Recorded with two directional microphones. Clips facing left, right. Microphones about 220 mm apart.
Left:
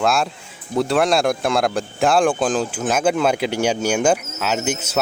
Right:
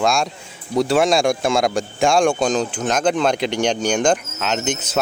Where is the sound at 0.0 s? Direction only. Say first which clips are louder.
Even; 5° left (ahead or behind).